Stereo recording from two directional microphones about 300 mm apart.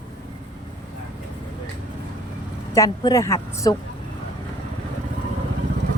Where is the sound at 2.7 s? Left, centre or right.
Centre.